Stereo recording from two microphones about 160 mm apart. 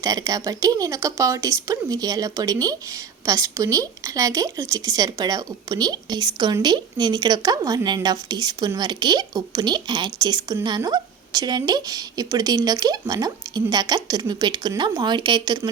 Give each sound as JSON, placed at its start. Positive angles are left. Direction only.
{"t": 0.0, "sound": "a woman's voice", "side_deg": -25}